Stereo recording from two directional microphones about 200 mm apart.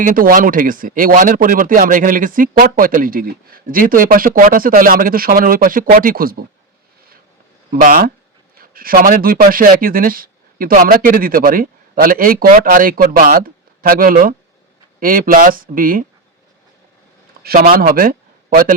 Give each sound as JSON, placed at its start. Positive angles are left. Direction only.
{"t": 0.0, "sound": "speech", "side_deg": -45}
{"t": 7.8, "sound": "speech", "side_deg": -45}
{"t": 17.4, "sound": "speech", "side_deg": -45}